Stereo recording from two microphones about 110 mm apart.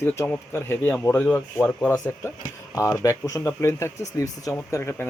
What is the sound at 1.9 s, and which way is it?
Speech, 30° left (ahead or behind).